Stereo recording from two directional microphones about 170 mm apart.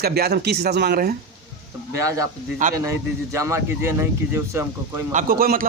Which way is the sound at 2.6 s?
50° right (ahead or behind).